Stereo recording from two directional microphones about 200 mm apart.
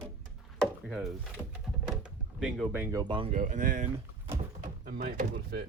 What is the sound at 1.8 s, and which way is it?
Door, 5° right (ahead or behind).